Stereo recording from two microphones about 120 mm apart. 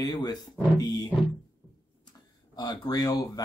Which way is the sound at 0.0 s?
35° left (ahead or behind).